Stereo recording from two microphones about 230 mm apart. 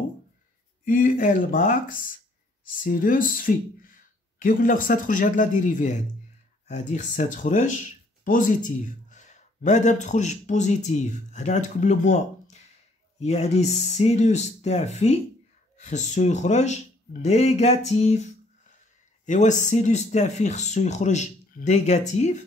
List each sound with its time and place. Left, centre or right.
0.8 s speech: left